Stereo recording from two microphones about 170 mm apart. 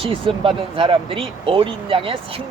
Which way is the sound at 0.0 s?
30° right (ahead or behind).